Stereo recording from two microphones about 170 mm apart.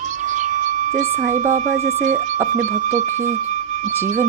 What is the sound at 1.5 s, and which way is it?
Speech, 45° right (ahead or behind).